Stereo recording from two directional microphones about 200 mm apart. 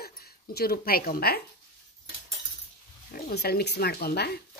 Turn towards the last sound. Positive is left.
turn(degrees=55)  # may be behind; listen again after turning